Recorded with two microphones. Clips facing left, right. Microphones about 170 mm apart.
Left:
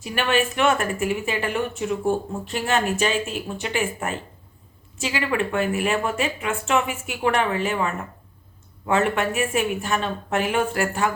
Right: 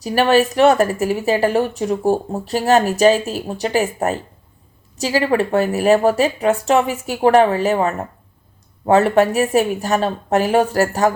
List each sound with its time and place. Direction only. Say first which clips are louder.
0.0 s speech: right 8 dB; 35° right (ahead or behind)